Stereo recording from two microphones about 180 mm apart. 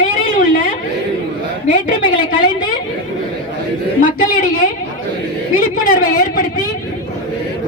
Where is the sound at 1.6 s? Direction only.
45° left (ahead or behind).